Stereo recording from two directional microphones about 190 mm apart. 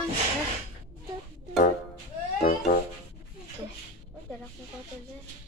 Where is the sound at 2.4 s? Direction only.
45° left (ahead or behind).